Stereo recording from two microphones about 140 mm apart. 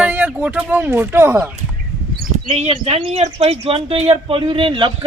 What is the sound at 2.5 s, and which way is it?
Speech, 50° right (ahead or behind).